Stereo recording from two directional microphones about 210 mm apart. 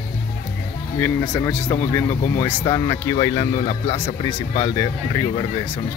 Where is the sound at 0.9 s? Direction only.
15° left (ahead or behind).